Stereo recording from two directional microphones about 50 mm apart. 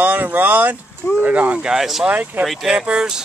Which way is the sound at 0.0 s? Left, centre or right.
Right.